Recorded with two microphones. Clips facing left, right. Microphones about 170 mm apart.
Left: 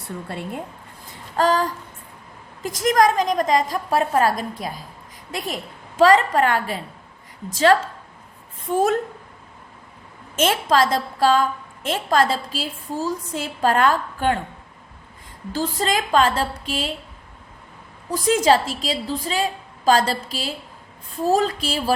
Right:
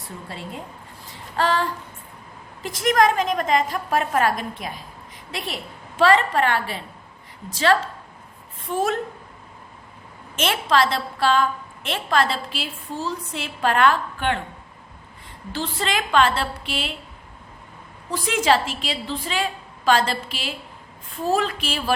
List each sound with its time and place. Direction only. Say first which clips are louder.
0.3 s a woman's voice: left 4 dB; 55° left (ahead or behind)
1.4 s a woman's voice: left 3 dB; 40° left (ahead or behind)
6.0 s a woman's voice: left 3 dB; 40° left (ahead or behind)
10.3 s a woman's voice: left 2 dB; 45° left (ahead or behind)
15.5 s a woman's voice: left 3 dB; 40° left (ahead or behind)
18.1 s a woman's voice: left 3 dB; 40° left (ahead or behind)